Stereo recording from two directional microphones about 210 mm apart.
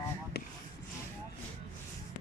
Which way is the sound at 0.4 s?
50° left (ahead or behind).